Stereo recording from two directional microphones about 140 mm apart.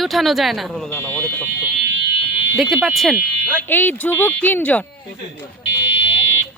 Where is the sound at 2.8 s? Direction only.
Centre (ahead or behind).